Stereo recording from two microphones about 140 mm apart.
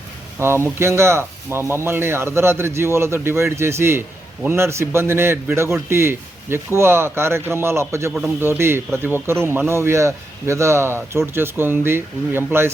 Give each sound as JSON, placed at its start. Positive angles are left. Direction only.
{"t": 0.3, "sound": "a man's voice", "side_deg": -15}